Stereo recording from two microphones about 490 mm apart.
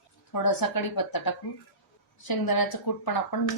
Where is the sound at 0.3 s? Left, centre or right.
Left.